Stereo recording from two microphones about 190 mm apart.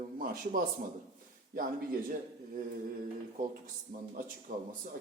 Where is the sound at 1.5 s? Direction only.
45° right (ahead or behind).